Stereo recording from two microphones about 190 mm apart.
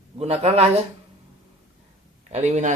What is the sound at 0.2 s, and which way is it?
Speech, 30° right (ahead or behind).